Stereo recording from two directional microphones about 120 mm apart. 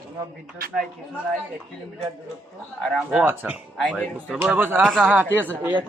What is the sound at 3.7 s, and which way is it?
Speech, 10° left (ahead or behind).